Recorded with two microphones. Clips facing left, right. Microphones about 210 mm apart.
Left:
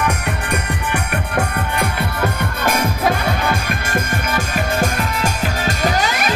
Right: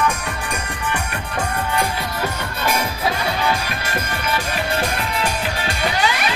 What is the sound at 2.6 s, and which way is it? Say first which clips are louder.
Music: left 3 dB; 50° left (ahead or behind).